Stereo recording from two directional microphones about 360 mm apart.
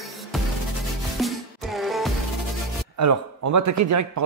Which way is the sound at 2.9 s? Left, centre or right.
Right.